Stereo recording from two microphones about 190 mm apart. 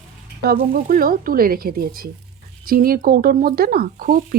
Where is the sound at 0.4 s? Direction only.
55° right (ahead or behind).